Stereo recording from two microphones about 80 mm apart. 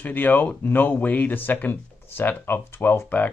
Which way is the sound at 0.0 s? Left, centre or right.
Left.